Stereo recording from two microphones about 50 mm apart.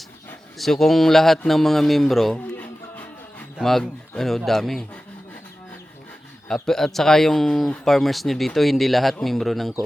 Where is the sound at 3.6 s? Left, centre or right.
Centre.